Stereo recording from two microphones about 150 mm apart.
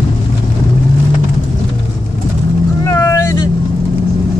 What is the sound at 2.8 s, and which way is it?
Vehicle, 20° left (ahead or behind).